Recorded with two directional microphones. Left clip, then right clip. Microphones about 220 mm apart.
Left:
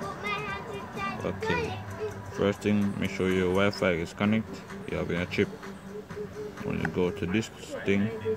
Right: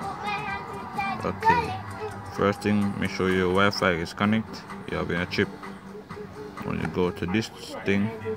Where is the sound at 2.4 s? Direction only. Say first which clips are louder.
Right 3 dB; 5° right (ahead or behind).